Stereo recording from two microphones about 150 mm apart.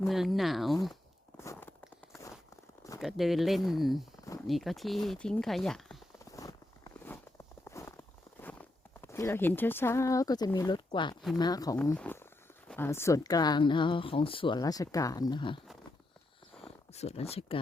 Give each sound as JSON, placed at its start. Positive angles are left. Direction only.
{"t": 0.1, "sound": "speech", "side_deg": 0}
{"t": 1.4, "sound": "a sound", "side_deg": 20}
{"t": 3.0, "sound": "speech", "side_deg": 0}
{"t": 6.3, "sound": "walk", "side_deg": 20}
{"t": 8.4, "sound": "speech", "side_deg": 10}
{"t": 11.8, "sound": "speech", "side_deg": 10}
{"t": 16.6, "sound": "speech", "side_deg": 45}